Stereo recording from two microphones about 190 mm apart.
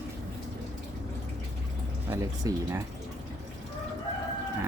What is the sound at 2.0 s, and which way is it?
Speech, 15° right (ahead or behind).